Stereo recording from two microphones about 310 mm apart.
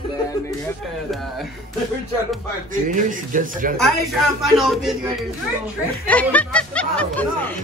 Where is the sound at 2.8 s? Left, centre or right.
Right.